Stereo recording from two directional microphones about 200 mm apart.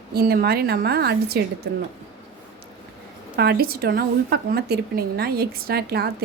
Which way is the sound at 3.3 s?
50° right (ahead or behind).